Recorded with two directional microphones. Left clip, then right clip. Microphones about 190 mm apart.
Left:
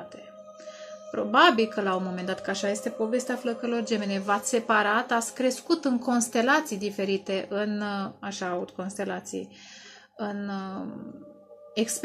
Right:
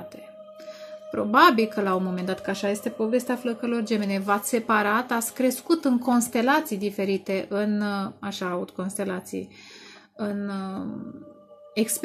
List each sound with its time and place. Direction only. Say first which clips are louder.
1.1 s speech: right 2 dB; 45° right (ahead or behind)